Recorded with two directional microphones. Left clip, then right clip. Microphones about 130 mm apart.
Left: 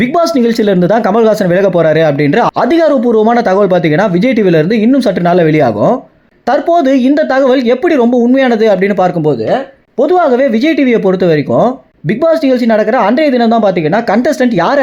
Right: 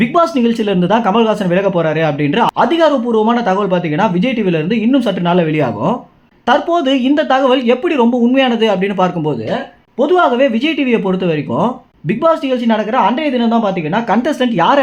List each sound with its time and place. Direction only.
0.0 s speech: 45° left (ahead or behind)
14.2 s speech: 30° left (ahead or behind)